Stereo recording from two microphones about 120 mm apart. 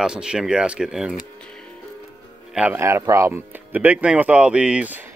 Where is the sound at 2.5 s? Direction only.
10° right (ahead or behind).